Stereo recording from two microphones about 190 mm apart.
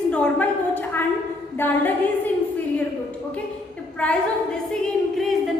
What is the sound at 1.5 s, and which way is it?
Speech, 10° left (ahead or behind).